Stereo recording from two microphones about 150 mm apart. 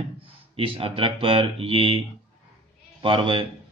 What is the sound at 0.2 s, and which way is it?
Speech, 40° right (ahead or behind).